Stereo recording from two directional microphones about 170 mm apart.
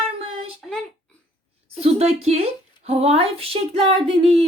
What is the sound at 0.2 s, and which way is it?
Child singing, 35° right (ahead or behind).